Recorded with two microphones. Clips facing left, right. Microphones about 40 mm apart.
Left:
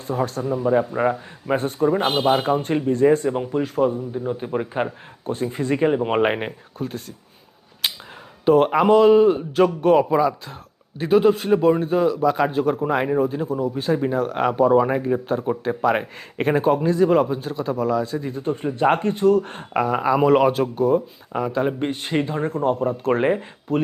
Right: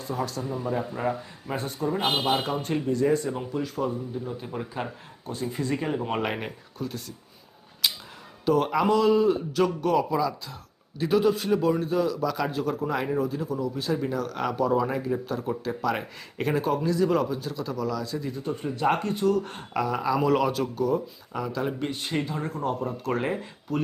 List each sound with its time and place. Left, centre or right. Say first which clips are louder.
0.1 s speech: left 7 dB; left
0.4 s speech: left 9 dB; centre
2.6 s speech: left 6 dB; left
7.8 s a sound: left 2 dB; left
8.4 s speech: left 7 dB; left